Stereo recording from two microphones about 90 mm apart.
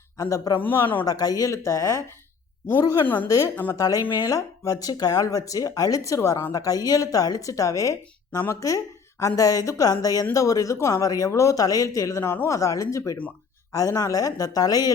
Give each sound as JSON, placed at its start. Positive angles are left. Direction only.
{"t": 0.2, "sound": "a woman's voice", "side_deg": 40}
{"t": 0.6, "sound": "a man's voice", "side_deg": 25}
{"t": 1.0, "sound": "a woman's voice", "side_deg": 45}
{"t": 3.2, "sound": "a woman's voice", "side_deg": 35}
{"t": 12.2, "sound": "a man's voice", "side_deg": 20}
{"t": 12.5, "sound": "a woman's voice", "side_deg": 35}